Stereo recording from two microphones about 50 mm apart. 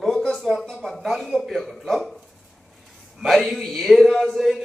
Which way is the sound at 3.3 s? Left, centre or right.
Centre.